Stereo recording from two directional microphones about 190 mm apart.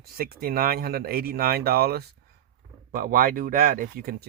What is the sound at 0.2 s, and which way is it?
Speech, 50° right (ahead or behind).